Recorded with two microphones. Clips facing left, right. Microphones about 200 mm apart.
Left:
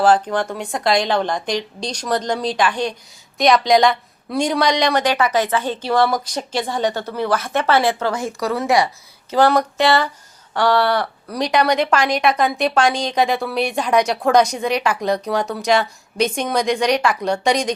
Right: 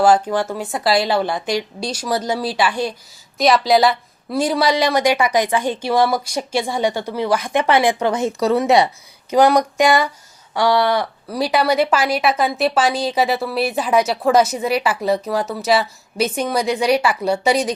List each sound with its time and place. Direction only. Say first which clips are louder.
0.0 s speech: right 1 dB; 10° right (ahead or behind)